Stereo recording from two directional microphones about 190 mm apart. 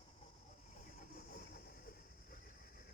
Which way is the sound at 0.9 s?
45° left (ahead or behind).